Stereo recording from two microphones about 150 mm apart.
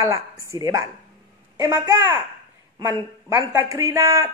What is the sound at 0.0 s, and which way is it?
A woman's voice, 20° right (ahead or behind).